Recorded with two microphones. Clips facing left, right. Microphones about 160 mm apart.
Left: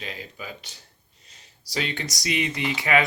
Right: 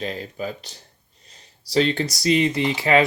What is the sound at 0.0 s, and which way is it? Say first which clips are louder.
Speech: right 9 dB; 40° right (ahead or behind).